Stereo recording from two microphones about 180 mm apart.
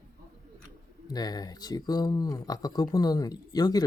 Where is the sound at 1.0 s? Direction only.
20° left (ahead or behind).